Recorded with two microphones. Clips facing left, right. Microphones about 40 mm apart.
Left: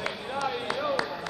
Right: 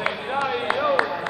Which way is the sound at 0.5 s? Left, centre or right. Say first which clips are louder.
Right 7 dB; right.